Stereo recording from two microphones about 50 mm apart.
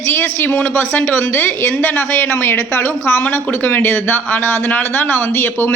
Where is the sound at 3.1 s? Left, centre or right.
Left.